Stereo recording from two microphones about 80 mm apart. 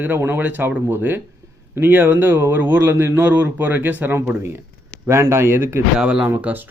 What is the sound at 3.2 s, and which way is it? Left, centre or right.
Speech, right.